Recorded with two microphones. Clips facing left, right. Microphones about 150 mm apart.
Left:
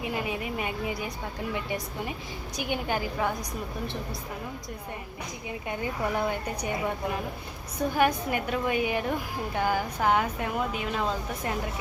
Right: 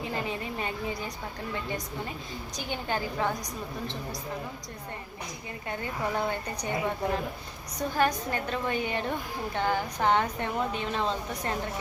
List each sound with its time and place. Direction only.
0.0 s a woman's voice: 10° left (ahead or behind)
5.6 s a woman's voice: 10° left (ahead or behind)
7.8 s a woman's voice: 10° left (ahead or behind)